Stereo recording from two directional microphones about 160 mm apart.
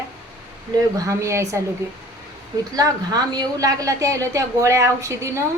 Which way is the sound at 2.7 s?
25° right (ahead or behind).